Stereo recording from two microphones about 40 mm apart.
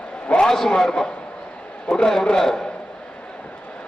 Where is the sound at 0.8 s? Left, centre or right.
Centre.